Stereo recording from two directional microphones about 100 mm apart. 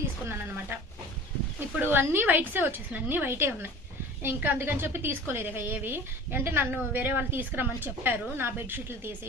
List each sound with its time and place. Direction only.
0.3 s a woman's voice: 20° right (ahead or behind)